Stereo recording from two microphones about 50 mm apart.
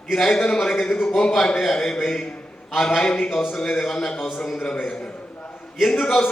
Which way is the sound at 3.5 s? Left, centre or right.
Centre.